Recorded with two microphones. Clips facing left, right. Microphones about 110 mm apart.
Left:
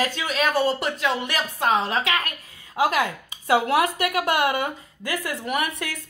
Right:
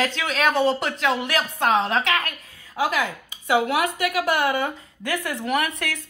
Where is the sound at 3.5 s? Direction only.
30° left (ahead or behind).